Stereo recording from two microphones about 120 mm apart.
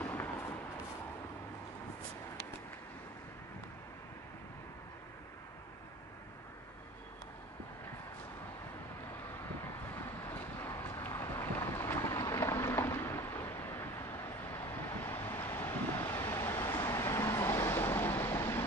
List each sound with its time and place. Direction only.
0.0 s a sound: 20° left (ahead or behind)
9.8 s boat: 25° left (ahead or behind)
12.2 s vehicle: 25° left (ahead or behind)